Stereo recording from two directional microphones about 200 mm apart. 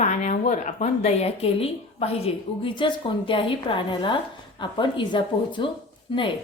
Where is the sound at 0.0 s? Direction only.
35° left (ahead or behind).